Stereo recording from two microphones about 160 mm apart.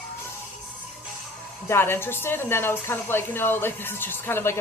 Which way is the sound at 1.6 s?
15° left (ahead or behind).